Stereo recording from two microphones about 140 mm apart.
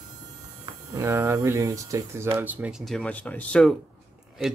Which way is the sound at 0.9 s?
20° right (ahead or behind).